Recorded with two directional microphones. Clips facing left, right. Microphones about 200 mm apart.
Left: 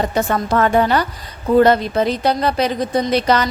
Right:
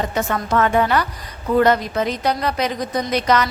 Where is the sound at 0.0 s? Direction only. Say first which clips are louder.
Left 4 dB; 35° left (ahead or behind).